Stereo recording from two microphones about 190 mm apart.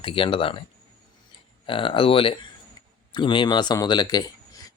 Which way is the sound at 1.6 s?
25° left (ahead or behind).